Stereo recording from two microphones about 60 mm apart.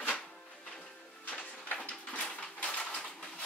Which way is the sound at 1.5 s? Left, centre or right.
Centre.